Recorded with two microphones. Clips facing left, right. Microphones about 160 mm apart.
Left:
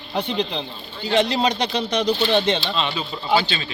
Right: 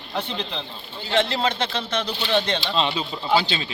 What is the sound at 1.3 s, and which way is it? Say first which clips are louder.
Speech: left 3 dB; 15° left (ahead or behind).